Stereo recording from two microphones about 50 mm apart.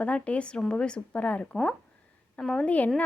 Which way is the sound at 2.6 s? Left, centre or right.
Left.